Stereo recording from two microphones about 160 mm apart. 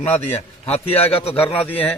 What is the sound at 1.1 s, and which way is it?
Speech, 35° left (ahead or behind).